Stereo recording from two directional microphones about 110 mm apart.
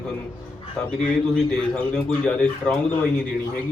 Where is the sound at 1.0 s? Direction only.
10° left (ahead or behind).